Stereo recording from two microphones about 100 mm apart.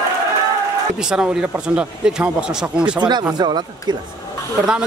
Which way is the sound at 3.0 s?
45° right (ahead or behind).